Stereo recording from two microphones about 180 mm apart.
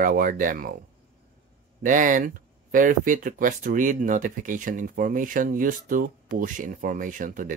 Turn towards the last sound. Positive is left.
turn(degrees=-45)  # may be behind; listen again after turning